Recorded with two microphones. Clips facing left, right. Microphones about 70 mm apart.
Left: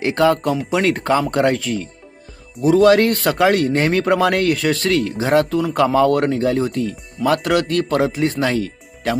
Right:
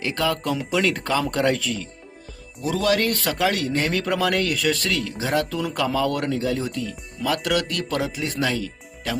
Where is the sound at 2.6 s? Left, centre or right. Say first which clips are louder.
Left 9 dB; left.